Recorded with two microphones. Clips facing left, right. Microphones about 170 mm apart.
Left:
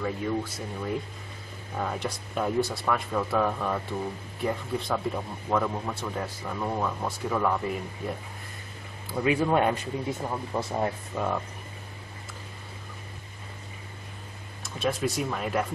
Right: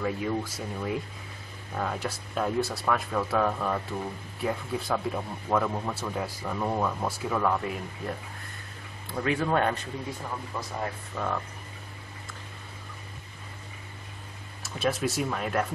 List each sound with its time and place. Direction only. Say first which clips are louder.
0.0 s speech: even; 5° right (ahead or behind)
9.1 s speech: left 3 dB; 10° left (ahead or behind)
10.2 s speech: left 5 dB; 30° left (ahead or behind)
11.1 s speech: left 1 dB; 10° left (ahead or behind)
14.6 s speech: even; 5° right (ahead or behind)